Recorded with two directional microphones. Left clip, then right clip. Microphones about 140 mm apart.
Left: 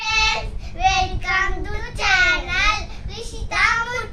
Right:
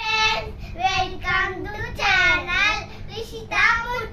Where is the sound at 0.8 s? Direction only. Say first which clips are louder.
Left 3 dB; 15° left (ahead or behind).